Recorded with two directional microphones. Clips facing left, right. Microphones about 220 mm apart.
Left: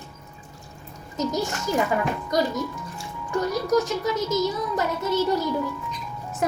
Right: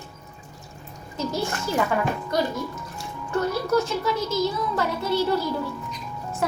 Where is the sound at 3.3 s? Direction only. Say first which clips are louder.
Even; 15° left (ahead or behind).